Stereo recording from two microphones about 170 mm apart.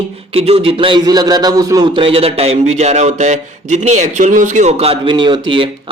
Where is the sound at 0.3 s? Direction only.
35° right (ahead or behind).